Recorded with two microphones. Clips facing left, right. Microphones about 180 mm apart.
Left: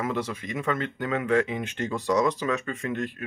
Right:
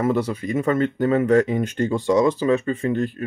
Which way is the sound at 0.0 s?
40° right (ahead or behind).